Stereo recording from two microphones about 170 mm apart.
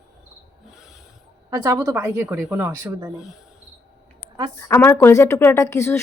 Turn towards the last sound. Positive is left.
turn(degrees=15)  # may be behind; listen again after turning